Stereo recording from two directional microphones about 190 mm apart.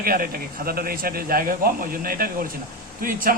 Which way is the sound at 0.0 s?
50° right (ahead or behind).